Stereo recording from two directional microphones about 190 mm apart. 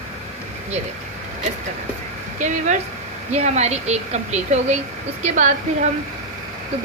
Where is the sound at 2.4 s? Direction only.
40° right (ahead or behind).